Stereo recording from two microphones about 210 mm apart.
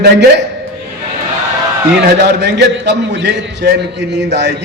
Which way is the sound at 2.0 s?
50° right (ahead or behind).